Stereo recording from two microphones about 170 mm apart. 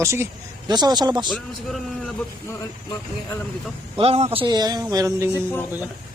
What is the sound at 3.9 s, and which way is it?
A man's voice, 35° right (ahead or behind).